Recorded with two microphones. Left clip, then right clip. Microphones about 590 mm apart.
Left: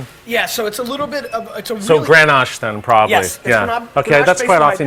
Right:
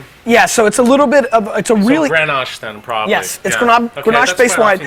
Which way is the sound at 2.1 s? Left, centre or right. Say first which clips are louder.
Left 4 dB; left.